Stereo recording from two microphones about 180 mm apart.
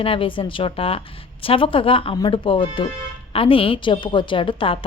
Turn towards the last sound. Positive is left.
turn(degrees=30)  # may be behind; listen again after turning